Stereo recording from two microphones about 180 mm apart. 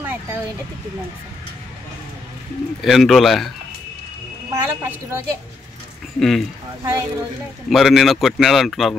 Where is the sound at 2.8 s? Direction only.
Centre (ahead or behind).